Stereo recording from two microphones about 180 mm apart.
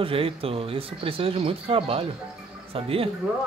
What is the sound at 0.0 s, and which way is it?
Speech, 30° right (ahead or behind).